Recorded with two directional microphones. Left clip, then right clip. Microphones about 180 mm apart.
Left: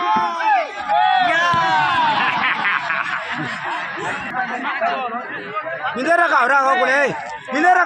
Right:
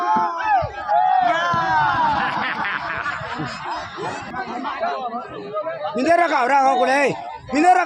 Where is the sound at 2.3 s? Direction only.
75° right (ahead or behind).